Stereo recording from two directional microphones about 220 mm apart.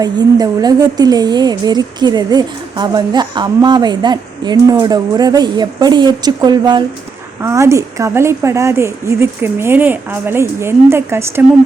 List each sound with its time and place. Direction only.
0.0 s a woman's voice: 15° right (ahead or behind)